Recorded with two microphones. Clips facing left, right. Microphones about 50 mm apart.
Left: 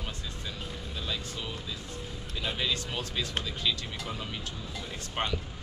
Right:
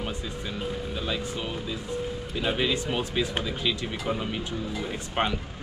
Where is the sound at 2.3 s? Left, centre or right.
Right.